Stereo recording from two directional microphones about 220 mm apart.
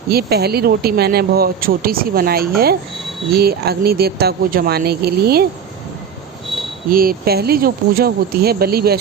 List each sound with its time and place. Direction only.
0.1 s speech: 45° right (ahead or behind)
6.9 s speech: 40° right (ahead or behind)